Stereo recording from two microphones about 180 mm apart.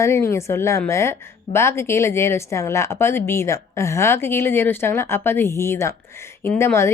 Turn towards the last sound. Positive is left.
turn(degrees=15)  # may be behind; listen again after turning